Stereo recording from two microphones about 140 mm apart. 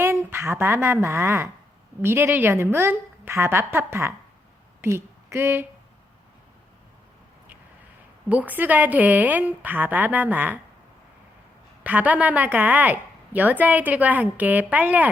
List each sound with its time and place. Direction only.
0.0 s a woman's voice: 15° right (ahead or behind)
4.8 s a sound: 20° right (ahead or behind)
8.3 s a woman's voice: 10° right (ahead or behind)
11.8 s a woman's voice: 10° right (ahead or behind)